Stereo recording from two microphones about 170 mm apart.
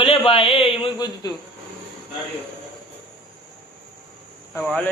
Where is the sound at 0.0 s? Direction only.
35° left (ahead or behind).